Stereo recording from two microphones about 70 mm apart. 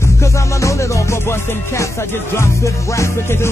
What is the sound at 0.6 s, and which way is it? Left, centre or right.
Music, left.